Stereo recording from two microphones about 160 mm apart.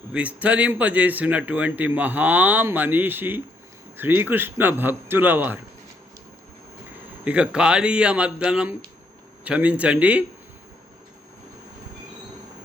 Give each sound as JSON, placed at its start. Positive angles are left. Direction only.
{"t": 0.1, "sound": "speech", "side_deg": -10}
{"t": 7.3, "sound": "speech", "side_deg": -5}